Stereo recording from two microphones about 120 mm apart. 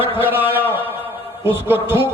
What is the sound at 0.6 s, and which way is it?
Speech, 15° right (ahead or behind).